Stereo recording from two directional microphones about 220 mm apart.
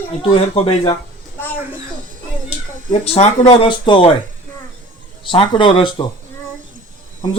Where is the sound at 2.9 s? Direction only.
25° left (ahead or behind).